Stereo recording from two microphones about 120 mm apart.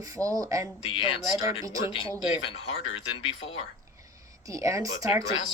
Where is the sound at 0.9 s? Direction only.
45° left (ahead or behind).